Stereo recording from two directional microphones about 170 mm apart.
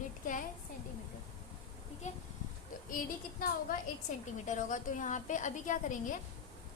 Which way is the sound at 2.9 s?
55° left (ahead or behind).